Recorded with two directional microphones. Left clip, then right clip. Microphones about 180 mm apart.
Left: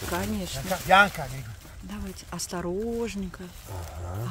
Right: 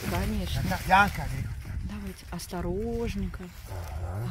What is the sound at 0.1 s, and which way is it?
Speech, 10° left (ahead or behind).